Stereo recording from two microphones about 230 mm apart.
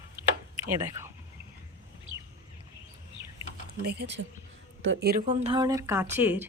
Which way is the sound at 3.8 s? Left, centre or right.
Right.